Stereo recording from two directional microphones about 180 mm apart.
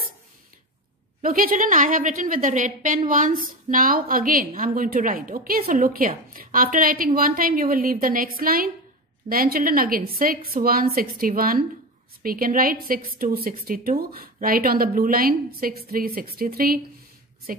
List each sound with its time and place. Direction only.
1.2 s a woman's voice: 50° right (ahead or behind)